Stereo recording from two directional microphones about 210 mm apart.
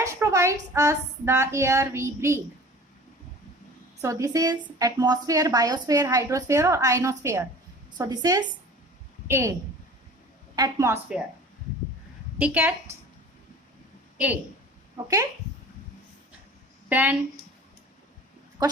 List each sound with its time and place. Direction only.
0.0 s a woman's voice: 15° right (ahead or behind)
4.0 s a woman's voice: 15° right (ahead or behind)
10.5 s a woman's voice: 15° right (ahead or behind)
12.4 s a woman's voice: 10° right (ahead or behind)
15.0 s a woman's voice: 15° right (ahead or behind)
16.9 s a woman's voice: 10° right (ahead or behind)